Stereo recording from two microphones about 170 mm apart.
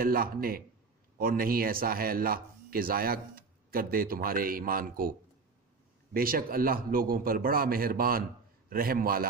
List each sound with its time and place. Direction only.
0.0 s speech: 60° right (ahead or behind)
6.1 s speech: 60° right (ahead or behind)